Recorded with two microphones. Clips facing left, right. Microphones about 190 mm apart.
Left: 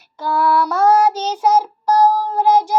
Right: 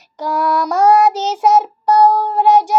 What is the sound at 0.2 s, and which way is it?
Child singing, 20° right (ahead or behind).